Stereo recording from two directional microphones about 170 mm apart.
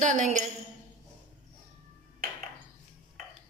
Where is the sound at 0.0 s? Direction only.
45° right (ahead or behind).